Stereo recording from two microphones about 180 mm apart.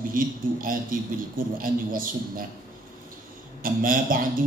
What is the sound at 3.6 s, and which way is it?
Speech, 50° right (ahead or behind).